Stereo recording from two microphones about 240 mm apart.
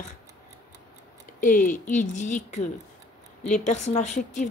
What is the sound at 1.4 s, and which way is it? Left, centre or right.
Speech, left.